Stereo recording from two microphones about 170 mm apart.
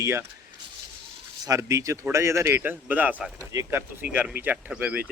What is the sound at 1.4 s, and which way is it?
Speech, 20° right (ahead or behind).